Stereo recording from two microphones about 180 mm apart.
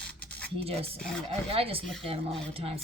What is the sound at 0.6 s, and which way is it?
Speech, 30° right (ahead or behind).